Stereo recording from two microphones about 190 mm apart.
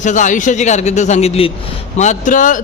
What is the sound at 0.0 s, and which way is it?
A man's voice, 40° left (ahead or behind).